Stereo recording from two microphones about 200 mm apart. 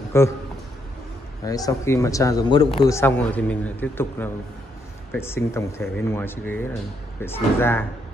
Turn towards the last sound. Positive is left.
turn(degrees=10)  # may be behind; listen again after turning